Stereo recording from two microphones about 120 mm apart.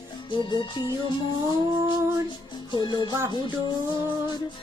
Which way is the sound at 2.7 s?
35° left (ahead or behind).